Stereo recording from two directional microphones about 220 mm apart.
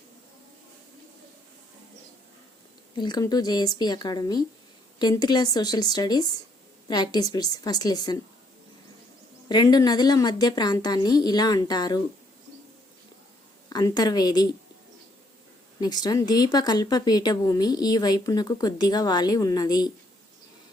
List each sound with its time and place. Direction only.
3.0 s speech: 20° left (ahead or behind)
9.5 s speech: 20° left (ahead or behind)
13.7 s speech: 20° left (ahead or behind)
15.8 s speech: 20° left (ahead or behind)